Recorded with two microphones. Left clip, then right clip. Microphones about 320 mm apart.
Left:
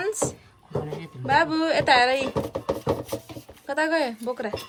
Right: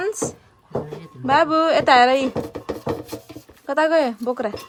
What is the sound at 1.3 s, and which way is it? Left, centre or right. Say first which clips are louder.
Speech: right 5 dB; right.